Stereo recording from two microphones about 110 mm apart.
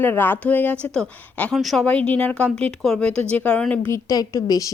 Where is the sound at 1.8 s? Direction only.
10° left (ahead or behind).